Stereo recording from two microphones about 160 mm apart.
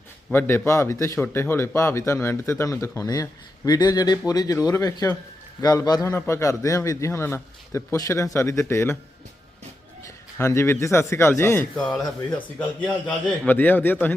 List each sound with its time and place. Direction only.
0.3 s a man's voice: 15° left (ahead or behind)
10.3 s a man's voice: 15° left (ahead or behind)
11.8 s a man's voice: 5° left (ahead or behind)